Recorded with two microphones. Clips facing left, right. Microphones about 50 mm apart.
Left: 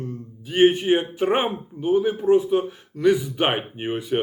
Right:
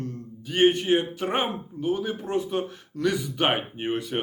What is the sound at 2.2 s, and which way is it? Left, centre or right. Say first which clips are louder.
Speech: left 9 dB; centre.